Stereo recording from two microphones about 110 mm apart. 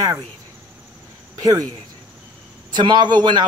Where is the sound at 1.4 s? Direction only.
35° right (ahead or behind).